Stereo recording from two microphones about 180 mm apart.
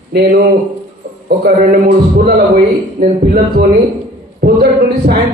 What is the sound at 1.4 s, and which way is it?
A man's voice, 55° right (ahead or behind).